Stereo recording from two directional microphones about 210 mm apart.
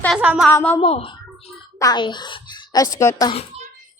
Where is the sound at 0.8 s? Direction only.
25° left (ahead or behind).